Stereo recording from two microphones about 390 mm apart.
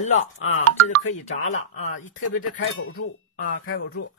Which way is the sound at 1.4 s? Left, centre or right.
Left.